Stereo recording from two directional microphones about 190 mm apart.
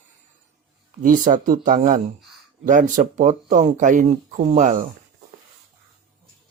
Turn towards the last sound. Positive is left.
turn(degrees=-40)  # may be behind; listen again after turning